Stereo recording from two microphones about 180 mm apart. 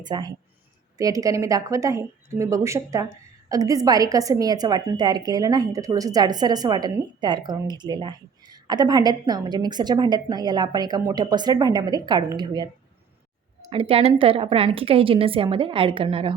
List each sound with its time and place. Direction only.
0.0 s a woman's voice: 25° right (ahead or behind)
13.7 s a woman's voice: 30° right (ahead or behind)